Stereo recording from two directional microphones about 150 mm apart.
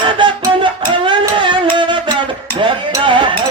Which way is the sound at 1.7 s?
35° right (ahead or behind).